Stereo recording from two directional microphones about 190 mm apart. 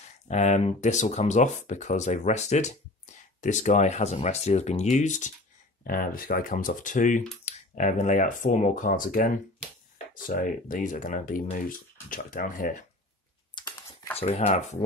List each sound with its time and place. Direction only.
0.3 s speech: 35° left (ahead or behind)
13.6 s typing: 15° left (ahead or behind)
14.1 s speech: 30° left (ahead or behind)